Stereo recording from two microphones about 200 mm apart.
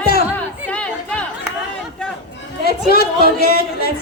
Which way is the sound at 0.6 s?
5° left (ahead or behind).